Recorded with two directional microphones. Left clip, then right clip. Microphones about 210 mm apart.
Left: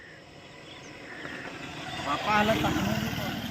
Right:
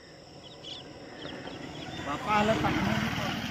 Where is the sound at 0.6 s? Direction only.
40° left (ahead or behind).